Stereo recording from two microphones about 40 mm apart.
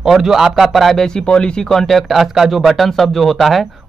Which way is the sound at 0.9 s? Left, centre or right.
Centre.